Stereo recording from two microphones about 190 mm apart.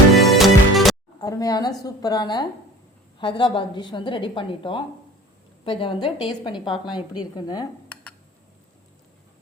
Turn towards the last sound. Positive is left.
turn(degrees=20)  # may be behind; listen again after turning